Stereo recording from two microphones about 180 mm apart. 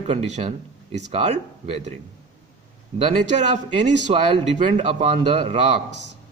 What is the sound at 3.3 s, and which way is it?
A man's voice, 40° right (ahead or behind).